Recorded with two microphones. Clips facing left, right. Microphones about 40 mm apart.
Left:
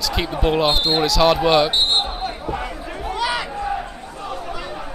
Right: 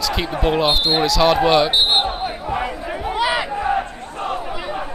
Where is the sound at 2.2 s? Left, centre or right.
Centre.